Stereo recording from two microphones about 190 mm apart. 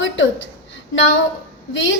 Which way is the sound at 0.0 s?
75° left (ahead or behind).